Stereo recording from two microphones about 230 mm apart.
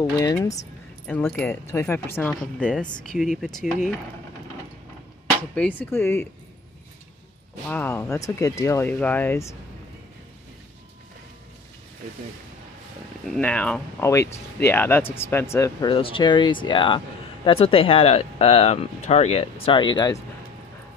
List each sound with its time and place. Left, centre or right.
0.0 s speech: centre
5.5 s speech: centre
7.6 s speech: centre
13.3 s speech: centre